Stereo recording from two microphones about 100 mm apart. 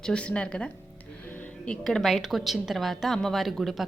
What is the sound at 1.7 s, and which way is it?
A woman's voice, 5° left (ahead or behind).